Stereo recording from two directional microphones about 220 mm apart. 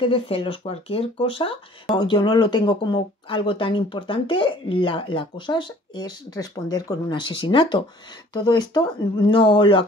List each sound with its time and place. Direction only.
0.0 s speech: 25° left (ahead or behind)